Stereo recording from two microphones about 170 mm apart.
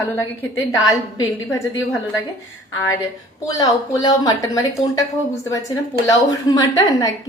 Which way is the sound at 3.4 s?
20° left (ahead or behind).